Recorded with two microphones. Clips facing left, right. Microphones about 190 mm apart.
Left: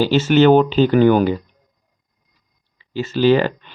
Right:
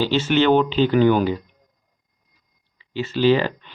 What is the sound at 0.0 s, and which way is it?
Speech, 45° left (ahead or behind).